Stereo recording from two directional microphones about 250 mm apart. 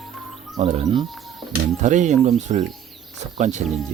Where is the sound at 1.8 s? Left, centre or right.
Right.